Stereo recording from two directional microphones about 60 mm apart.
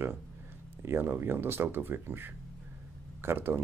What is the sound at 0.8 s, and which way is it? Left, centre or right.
Speech, right.